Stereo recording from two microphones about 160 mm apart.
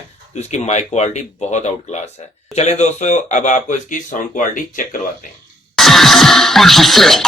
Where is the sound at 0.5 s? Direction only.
45° left (ahead or behind).